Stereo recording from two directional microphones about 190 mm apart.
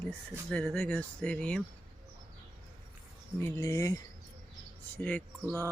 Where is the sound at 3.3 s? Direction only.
15° left (ahead or behind).